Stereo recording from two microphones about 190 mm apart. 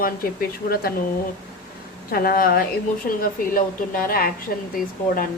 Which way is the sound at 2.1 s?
50° left (ahead or behind).